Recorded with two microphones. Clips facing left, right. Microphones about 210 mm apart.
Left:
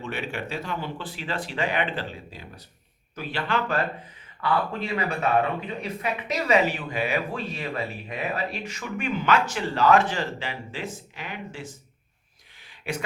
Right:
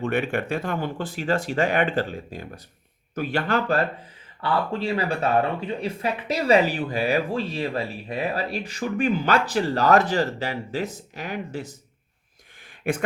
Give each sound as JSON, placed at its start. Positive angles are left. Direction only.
{"t": 0.0, "sound": "speech", "side_deg": -55}
{"t": 4.4, "sound": "speech", "side_deg": -30}
{"t": 12.9, "sound": "speech", "side_deg": -50}